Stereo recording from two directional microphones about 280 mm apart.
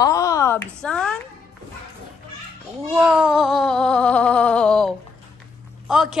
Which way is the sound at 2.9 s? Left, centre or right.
Centre.